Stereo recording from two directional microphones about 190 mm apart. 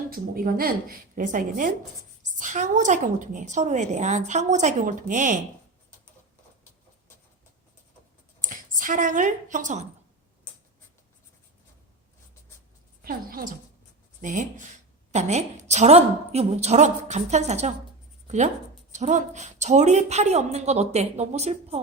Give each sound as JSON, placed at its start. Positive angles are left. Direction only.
{"t": 0.1, "sound": "a woman's voice", "side_deg": -50}
{"t": 8.4, "sound": "speech", "side_deg": -45}
{"t": 13.0, "sound": "a sound", "side_deg": -50}
{"t": 14.2, "sound": "a woman's voice", "side_deg": -40}